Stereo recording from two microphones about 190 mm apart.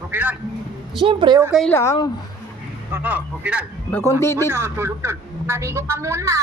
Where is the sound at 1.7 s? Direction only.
15° left (ahead or behind).